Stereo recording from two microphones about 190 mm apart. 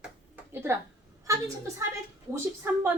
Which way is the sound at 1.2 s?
15° right (ahead or behind).